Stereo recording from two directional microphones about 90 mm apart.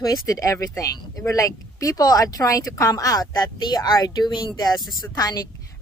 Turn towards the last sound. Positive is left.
turn(degrees=45)  # may be behind; listen again after turning